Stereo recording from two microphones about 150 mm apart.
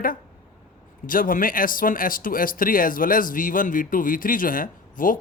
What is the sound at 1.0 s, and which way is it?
Speech, 65° left (ahead or behind).